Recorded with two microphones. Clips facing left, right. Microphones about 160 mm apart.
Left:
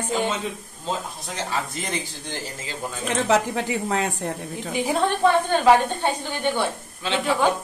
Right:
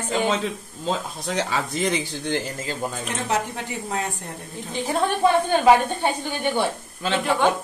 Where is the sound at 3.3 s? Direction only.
90° left.